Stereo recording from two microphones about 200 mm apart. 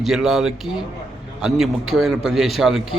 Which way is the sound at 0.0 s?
Centre (ahead or behind).